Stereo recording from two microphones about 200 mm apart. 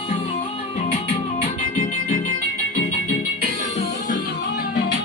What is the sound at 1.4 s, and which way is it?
Music, 40° left (ahead or behind).